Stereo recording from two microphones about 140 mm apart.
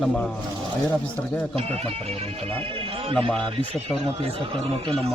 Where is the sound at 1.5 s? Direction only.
45° right (ahead or behind).